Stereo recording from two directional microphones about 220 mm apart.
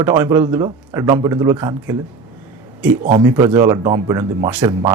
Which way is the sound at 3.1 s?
15° right (ahead or behind).